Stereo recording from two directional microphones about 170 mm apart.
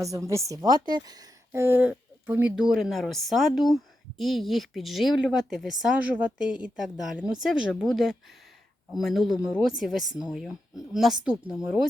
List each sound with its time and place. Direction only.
0.3 s speech: 20° right (ahead or behind)